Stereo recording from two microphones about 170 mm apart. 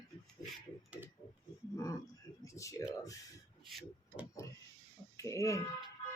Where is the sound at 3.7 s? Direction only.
Centre (ahead or behind).